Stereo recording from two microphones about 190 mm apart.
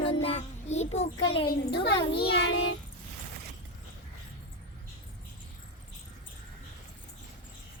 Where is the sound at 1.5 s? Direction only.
60° left (ahead or behind).